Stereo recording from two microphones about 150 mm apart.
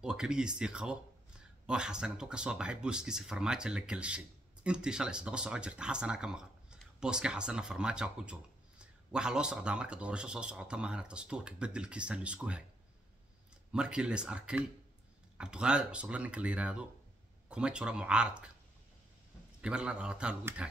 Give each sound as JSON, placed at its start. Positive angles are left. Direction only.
{"t": 0.0, "sound": "speech", "side_deg": -5}
{"t": 13.7, "sound": "speech", "side_deg": -5}
{"t": 19.6, "sound": "speech", "side_deg": -5}